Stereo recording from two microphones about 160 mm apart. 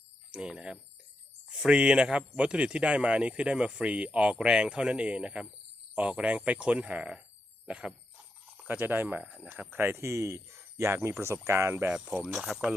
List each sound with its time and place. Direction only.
0.3 s speech: 5° right (ahead or behind)